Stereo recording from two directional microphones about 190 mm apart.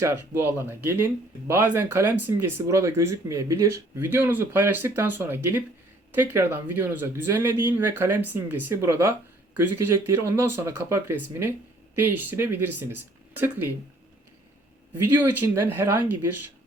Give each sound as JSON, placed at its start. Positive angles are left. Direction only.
{"t": 0.0, "sound": "speech", "side_deg": -10}
{"t": 14.9, "sound": "speech", "side_deg": -10}